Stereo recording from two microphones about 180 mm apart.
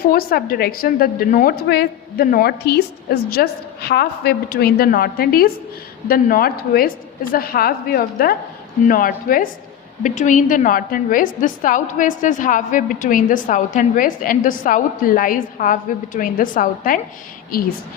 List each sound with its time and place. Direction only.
0.1 s a woman's voice: 55° left (ahead or behind)